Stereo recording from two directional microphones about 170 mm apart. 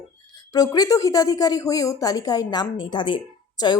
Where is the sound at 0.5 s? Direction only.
20° left (ahead or behind).